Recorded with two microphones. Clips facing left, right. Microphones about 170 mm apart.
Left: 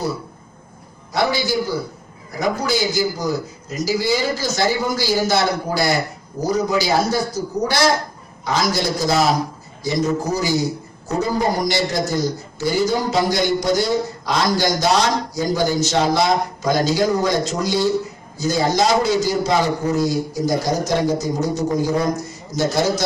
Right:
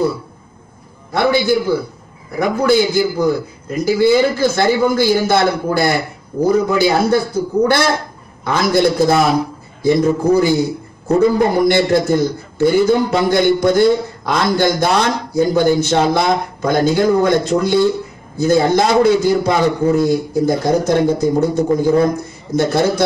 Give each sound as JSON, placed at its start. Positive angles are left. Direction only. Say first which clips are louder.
{"t": 1.1, "sound": "a man's voice", "louder": "right 5 dB", "side_deg": -55}